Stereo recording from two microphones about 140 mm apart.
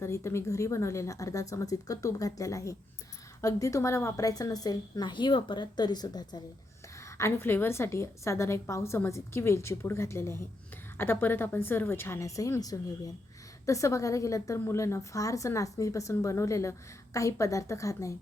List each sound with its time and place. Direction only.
0.0 s a woman's voice: 20° left (ahead or behind)